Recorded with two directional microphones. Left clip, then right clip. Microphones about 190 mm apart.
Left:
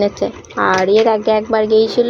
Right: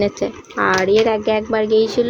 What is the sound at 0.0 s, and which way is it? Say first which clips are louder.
Speech: left 3 dB; 35° right (ahead or behind).